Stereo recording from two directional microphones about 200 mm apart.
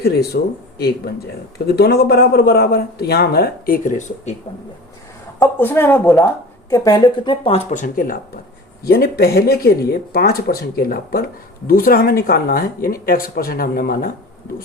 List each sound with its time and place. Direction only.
0.0 s speech: 50° left (ahead or behind)
5.4 s speech: 10° left (ahead or behind)
6.7 s speech: 20° left (ahead or behind)
7.7 s speech: 40° left (ahead or behind)